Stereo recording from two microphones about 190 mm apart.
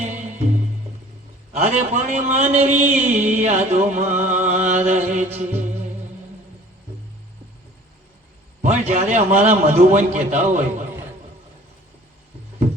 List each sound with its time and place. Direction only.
0.0 s music: 40° right (ahead or behind)
1.5 s a man's voice: 35° right (ahead or behind)
8.6 s a man's voice: 40° right (ahead or behind)